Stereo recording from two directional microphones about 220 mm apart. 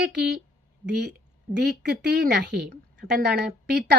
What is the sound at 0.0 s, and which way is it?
A woman's voice, 50° right (ahead or behind).